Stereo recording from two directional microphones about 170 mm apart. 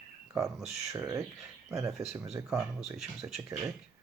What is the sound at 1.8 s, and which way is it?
Speech, centre (ahead or behind).